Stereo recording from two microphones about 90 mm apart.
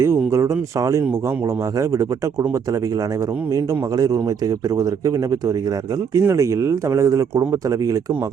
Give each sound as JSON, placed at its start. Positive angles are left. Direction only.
{"t": 0.0, "sound": "speech", "side_deg": -35}
{"t": 3.5, "sound": "a man's voice", "side_deg": -45}